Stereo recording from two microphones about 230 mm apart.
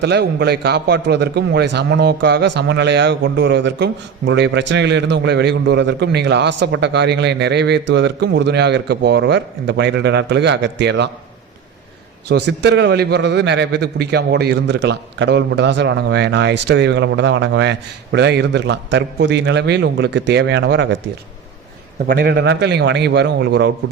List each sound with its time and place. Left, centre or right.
0.0 s a man's voice: right
12.5 s a man's voice: right
22.0 s a man's voice: right